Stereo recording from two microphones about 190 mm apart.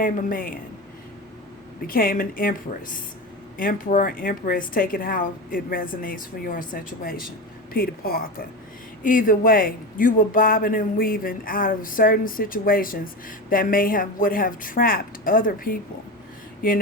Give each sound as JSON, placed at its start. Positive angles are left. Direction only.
{"t": 0.0, "sound": "a man's voice", "side_deg": 45}
{"t": 1.9, "sound": "a man's voice", "side_deg": 50}
{"t": 3.6, "sound": "a man's voice", "side_deg": 45}